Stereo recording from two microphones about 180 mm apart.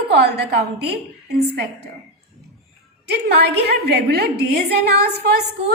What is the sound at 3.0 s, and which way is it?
A woman's voice, 65° right (ahead or behind).